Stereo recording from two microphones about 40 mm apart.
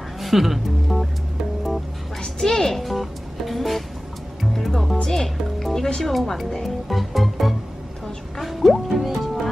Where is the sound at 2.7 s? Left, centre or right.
Centre.